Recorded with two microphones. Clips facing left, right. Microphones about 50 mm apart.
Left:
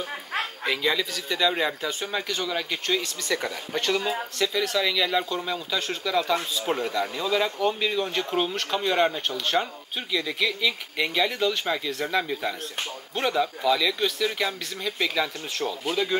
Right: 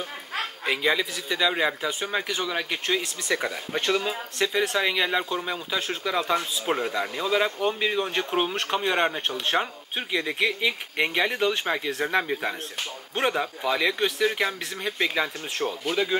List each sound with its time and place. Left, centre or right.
0.7 s speech: centre
4.4 s speech: right
15.9 s speech: centre